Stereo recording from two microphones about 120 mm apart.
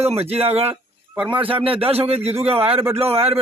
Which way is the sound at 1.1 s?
10° right (ahead or behind).